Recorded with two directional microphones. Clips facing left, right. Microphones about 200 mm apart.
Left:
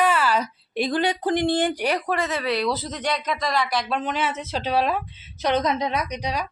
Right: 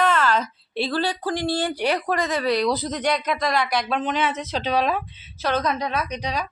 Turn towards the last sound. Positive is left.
turn(degrees=10)  # may be behind; listen again after turning